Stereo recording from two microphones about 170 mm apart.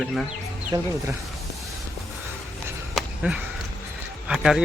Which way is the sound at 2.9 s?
5° right (ahead or behind).